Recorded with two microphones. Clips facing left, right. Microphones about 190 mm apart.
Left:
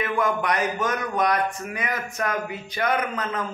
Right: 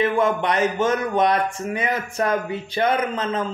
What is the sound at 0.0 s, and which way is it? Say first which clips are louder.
A man's voice: right 4 dB; 25° right (ahead or behind).